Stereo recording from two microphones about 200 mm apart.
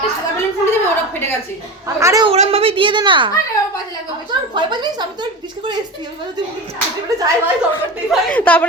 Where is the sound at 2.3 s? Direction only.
30° right (ahead or behind).